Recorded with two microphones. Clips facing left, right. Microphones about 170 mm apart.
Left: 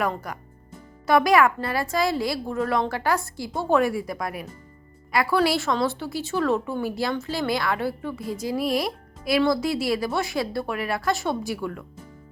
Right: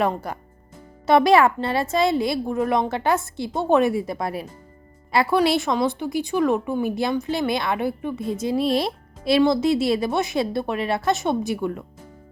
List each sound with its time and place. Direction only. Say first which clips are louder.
0.0 s a woman's voice: right 4 dB; 25° right (ahead or behind)